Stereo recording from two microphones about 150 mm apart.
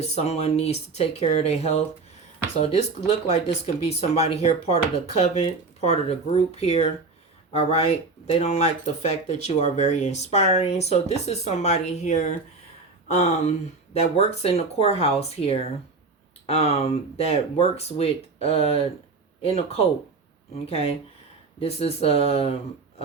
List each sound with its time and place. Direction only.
0.0 s speech: 45° left (ahead or behind)
3.1 s speech: 40° left (ahead or behind)